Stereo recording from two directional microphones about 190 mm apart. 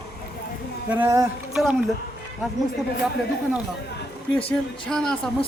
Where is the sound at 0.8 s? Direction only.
10° right (ahead or behind).